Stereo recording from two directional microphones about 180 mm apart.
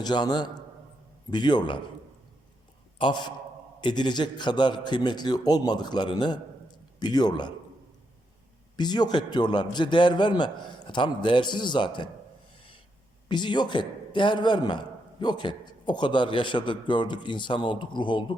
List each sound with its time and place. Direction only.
0.0 s a man's voice: 25° left (ahead or behind)
3.0 s a man's voice: 25° left (ahead or behind)
8.7 s a man's voice: 25° left (ahead or behind)
13.2 s a man's voice: 25° left (ahead or behind)